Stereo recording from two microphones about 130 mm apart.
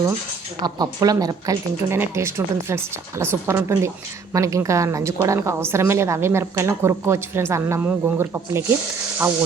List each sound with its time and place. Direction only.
0.6 s speech: 30° right (ahead or behind)